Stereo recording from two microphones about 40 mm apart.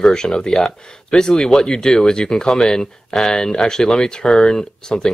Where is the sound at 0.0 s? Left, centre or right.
Centre.